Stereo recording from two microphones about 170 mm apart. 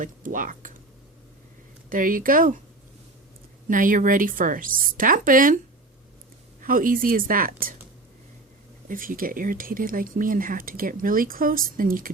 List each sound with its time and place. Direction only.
0.0 s speech: 50° right (ahead or behind)
1.9 s speech: 55° right (ahead or behind)
3.7 s speech: 50° right (ahead or behind)
6.6 s speech: 55° right (ahead or behind)
8.9 s speech: 55° right (ahead or behind)